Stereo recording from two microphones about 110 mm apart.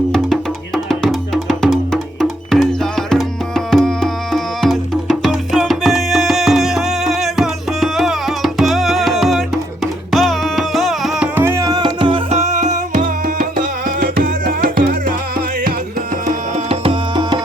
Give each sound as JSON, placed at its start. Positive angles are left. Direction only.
{"t": 0.9, "sound": "music", "side_deg": 5}
{"t": 11.3, "sound": "music", "side_deg": -25}
{"t": 11.7, "sound": "music", "side_deg": -45}
{"t": 12.3, "sound": "music", "side_deg": -85}
{"t": 16.6, "sound": "music", "side_deg": -55}